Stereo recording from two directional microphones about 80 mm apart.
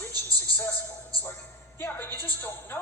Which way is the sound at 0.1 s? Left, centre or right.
Right.